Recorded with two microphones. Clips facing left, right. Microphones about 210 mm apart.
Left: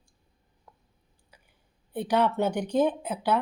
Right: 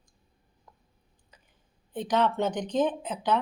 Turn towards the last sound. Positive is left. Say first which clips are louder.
# left 1 dB
turn(degrees=10)  # may be behind; listen again after turning